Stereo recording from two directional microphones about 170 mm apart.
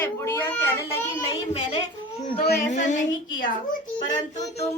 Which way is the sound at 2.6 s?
45° left (ahead or behind).